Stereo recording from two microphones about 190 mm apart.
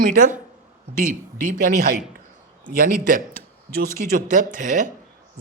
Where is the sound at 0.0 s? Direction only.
45° right (ahead or behind).